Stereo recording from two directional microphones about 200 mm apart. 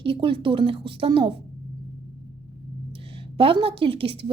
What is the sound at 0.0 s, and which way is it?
A woman's voice, 25° right (ahead or behind).